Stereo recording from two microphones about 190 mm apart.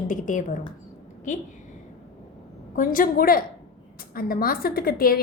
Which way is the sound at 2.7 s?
45° left (ahead or behind).